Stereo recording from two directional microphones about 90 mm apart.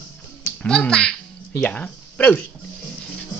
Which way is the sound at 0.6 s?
10° left (ahead or behind).